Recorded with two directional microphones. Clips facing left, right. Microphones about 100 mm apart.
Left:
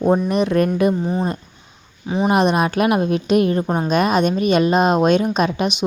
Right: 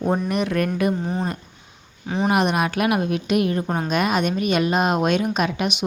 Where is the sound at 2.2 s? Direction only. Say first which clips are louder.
Left 4 dB; 30° left (ahead or behind).